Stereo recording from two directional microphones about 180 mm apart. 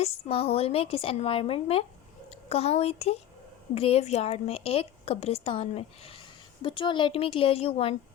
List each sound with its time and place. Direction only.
0.0 s a woman's voice: 35° left (ahead or behind)